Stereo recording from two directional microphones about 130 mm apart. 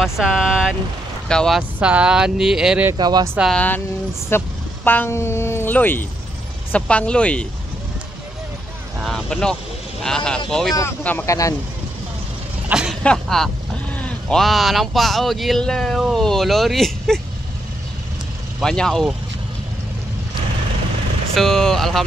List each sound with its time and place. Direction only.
0.0 s speech: 5° right (ahead or behind)
1.8 s speech: 10° right (ahead or behind)
3.0 s speech: 30° right (ahead or behind)
3.5 s speech: 15° left (ahead or behind)
9.0 s speech: 5° left (ahead or behind)
11.2 s speech: 25° left (ahead or behind)
12.6 s vehicle: 5° right (ahead or behind)
13.0 s speech: 5° left (ahead or behind)
18.6 s speech: 5° left (ahead or behind)
21.4 s speech: 5° left (ahead or behind)